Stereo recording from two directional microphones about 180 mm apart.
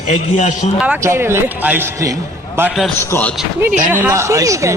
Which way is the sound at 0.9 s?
15° right (ahead or behind).